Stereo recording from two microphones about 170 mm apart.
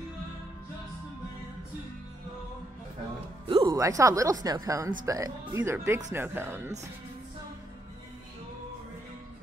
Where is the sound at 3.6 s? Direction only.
20° right (ahead or behind).